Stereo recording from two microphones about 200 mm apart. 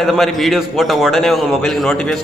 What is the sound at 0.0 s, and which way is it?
Speech, centre (ahead or behind).